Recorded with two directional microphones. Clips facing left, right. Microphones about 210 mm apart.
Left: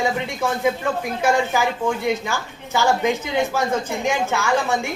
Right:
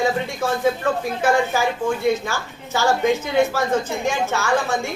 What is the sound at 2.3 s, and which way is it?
Speech, 15° left (ahead or behind).